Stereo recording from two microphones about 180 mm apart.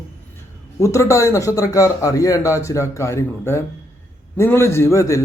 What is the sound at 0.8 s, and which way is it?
A man's voice, 15° left (ahead or behind).